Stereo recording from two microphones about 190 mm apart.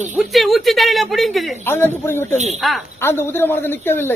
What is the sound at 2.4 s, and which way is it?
Speech, 35° right (ahead or behind).